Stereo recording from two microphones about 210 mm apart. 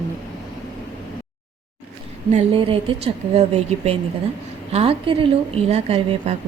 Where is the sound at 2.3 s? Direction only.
30° right (ahead or behind).